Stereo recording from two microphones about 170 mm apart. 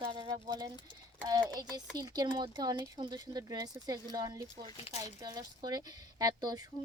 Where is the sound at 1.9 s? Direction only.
25° right (ahead or behind).